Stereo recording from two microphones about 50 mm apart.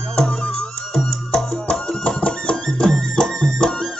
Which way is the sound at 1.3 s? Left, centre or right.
Centre.